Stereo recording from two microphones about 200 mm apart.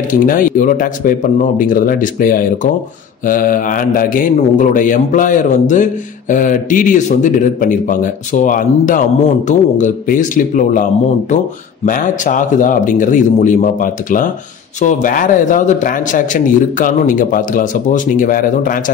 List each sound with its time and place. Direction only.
0.1 s a man's voice: 40° left (ahead or behind)